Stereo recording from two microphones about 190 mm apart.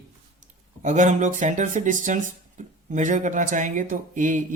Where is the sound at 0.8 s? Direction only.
40° right (ahead or behind).